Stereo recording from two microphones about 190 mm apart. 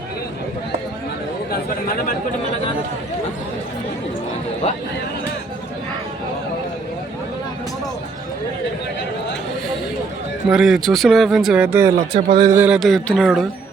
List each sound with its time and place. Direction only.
4.6 s speech: 35° left (ahead or behind)
10.5 s a man's voice: 5° right (ahead or behind)
12.1 s a man's voice: 25° right (ahead or behind); by 13.5 s centre (ahead or behind)